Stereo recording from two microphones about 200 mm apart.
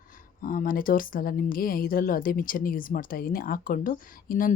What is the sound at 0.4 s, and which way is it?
Speech, 45° left (ahead or behind).